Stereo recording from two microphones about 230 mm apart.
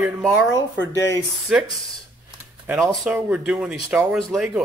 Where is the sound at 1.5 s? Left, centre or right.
Centre.